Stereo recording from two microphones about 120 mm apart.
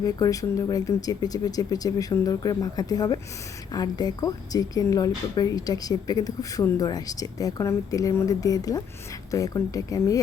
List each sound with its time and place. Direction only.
0.0 s a woman's voice: 30° left (ahead or behind)